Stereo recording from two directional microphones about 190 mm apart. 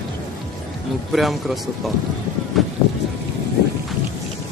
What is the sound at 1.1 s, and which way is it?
Speech, centre (ahead or behind).